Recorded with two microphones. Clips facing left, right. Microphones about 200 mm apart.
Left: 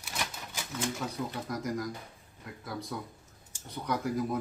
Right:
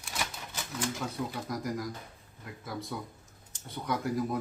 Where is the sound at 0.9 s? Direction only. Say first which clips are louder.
Even; centre (ahead or behind).